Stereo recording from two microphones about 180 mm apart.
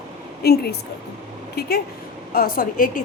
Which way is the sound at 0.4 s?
60° left (ahead or behind).